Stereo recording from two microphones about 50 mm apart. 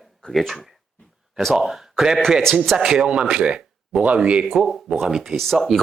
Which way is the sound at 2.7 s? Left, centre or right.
Centre.